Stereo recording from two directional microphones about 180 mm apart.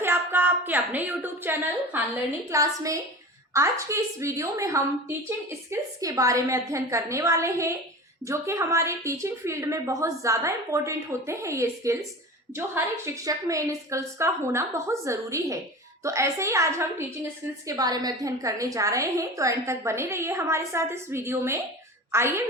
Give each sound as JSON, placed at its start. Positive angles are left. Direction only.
{"t": 0.0, "sound": "a woman's voice", "side_deg": -10}